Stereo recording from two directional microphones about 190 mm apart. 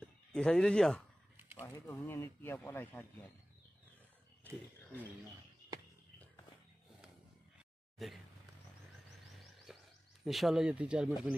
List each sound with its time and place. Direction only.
0.0 s speech: 5° left (ahead or behind)
8.0 s speech: centre (ahead or behind)
9.7 s a sound: centre (ahead or behind)
10.2 s speech: centre (ahead or behind)